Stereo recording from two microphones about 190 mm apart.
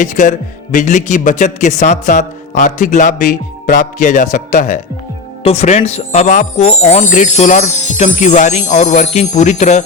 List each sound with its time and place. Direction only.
0.0 s speech: 40° left (ahead or behind)